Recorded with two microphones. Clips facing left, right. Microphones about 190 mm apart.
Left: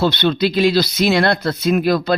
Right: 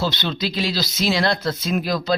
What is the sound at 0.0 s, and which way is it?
Speech, 60° left (ahead or behind).